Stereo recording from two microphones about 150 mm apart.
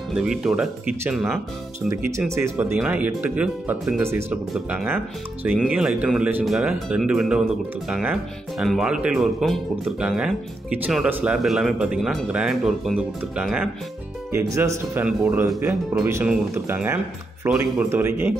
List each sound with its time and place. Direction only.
0.1 s speech: 5° right (ahead or behind)
1.9 s speech: 20° right (ahead or behind)
14.3 s speech: 20° right (ahead or behind)
16.5 s speech: 15° right (ahead or behind)